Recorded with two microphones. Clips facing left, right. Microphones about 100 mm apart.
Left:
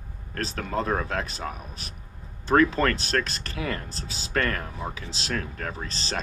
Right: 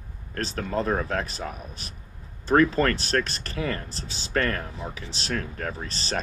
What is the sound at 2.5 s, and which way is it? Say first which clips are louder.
Speech: right 1 dB; 30° right (ahead or behind).